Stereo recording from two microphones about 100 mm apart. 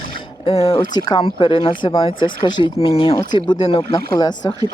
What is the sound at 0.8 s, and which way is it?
Speech, 45° left (ahead or behind).